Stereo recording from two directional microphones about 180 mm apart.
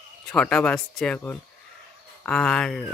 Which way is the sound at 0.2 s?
5° left (ahead or behind).